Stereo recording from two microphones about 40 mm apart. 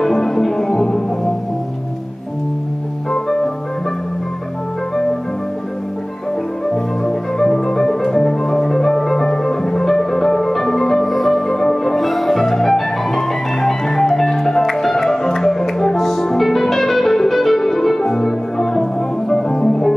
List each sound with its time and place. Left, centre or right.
0.0 s music: centre
3.1 s music: centre
6.7 s music: centre